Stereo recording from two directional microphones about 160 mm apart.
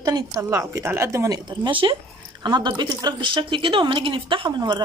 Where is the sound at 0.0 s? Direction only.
20° right (ahead or behind).